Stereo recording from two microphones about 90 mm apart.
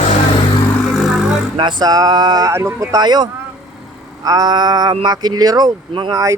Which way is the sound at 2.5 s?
35° right (ahead or behind).